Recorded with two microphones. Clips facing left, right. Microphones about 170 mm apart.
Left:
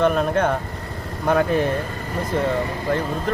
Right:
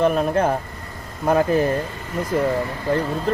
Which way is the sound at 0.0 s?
5° right (ahead or behind).